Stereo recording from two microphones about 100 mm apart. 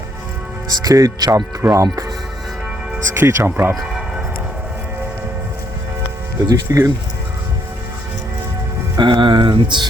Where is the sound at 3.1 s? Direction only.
25° right (ahead or behind).